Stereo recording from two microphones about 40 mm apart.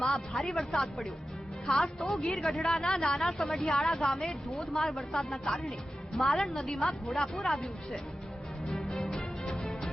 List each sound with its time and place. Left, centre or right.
0.0 s a woman's voice: centre
3.7 s a woman's voice: centre
8.6 s music: centre